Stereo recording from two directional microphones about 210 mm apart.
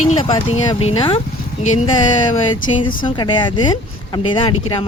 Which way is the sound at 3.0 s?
20° left (ahead or behind).